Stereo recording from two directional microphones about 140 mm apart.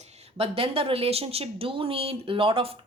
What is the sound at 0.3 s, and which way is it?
A woman's voice, 40° right (ahead or behind).